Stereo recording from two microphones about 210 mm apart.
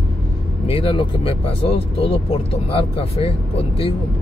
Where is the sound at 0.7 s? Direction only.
25° left (ahead or behind).